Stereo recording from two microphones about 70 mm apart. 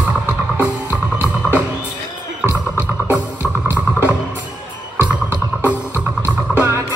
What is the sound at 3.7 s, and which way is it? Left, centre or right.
Music, right.